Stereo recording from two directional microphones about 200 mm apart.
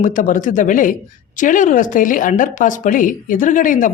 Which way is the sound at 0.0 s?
40° left (ahead or behind).